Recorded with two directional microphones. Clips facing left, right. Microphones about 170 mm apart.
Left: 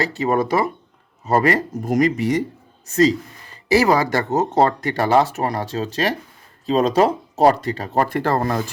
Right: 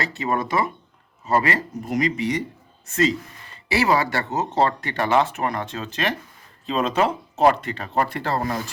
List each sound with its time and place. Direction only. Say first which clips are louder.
0.0 s speech: left 5 dB; 35° left (ahead or behind); by 8.6 s 50° left (ahead or behind)